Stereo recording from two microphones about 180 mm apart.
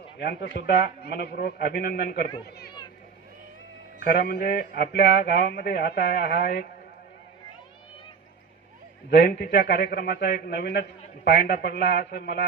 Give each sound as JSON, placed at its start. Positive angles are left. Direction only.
{"t": 0.2, "sound": "a man's voice", "side_deg": 70}
{"t": 4.0, "sound": "a man's voice", "side_deg": 55}
{"t": 9.0, "sound": "a man's voice", "side_deg": 70}